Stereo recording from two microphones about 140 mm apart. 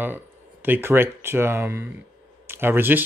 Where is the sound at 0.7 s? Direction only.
15° right (ahead or behind).